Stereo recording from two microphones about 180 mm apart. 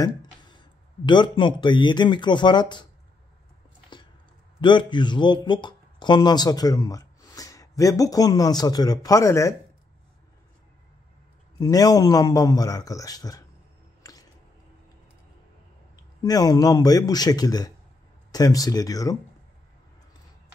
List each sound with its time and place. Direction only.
0.0 s speech: 25° left (ahead or behind)
3.9 s a sound: 25° left (ahead or behind)
4.6 s a man's voice: 25° left (ahead or behind)
11.6 s speech: 20° left (ahead or behind)
14.0 s squish: 20° left (ahead or behind)
16.2 s speech: 20° left (ahead or behind)